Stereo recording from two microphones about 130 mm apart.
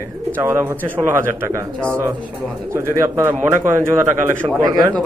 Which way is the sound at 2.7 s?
20° right (ahead or behind).